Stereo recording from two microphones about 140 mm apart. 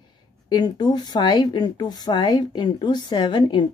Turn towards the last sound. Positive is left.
turn(degrees=30)  # may be behind; listen again after turning